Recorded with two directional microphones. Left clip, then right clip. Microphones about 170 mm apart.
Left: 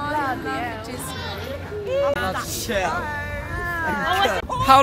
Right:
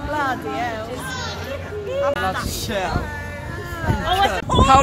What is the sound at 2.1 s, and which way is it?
Speech, 55° left (ahead or behind).